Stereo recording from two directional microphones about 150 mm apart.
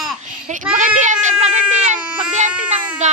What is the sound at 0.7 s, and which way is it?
Speech, 55° right (ahead or behind).